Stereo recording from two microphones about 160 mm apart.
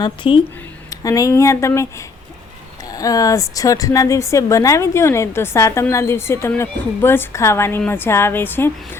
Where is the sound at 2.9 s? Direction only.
20° left (ahead or behind).